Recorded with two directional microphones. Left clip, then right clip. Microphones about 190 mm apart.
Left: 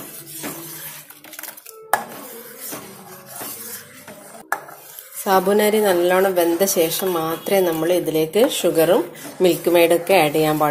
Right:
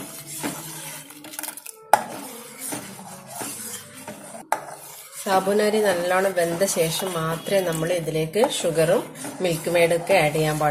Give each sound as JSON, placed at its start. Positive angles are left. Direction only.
{"t": 5.2, "sound": "speech", "side_deg": 35}